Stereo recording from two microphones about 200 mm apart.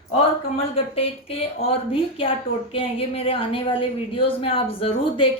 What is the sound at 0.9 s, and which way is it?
A woman's voice, 30° left (ahead or behind).